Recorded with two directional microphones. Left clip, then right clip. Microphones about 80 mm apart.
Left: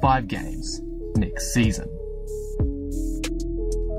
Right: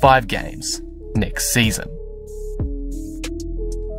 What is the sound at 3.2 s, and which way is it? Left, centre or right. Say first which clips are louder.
Music: right 2 dB; centre.